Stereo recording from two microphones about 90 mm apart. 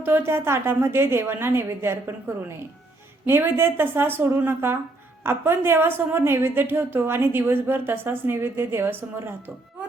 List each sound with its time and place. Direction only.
0.0 s a woman's voice: 25° right (ahead or behind)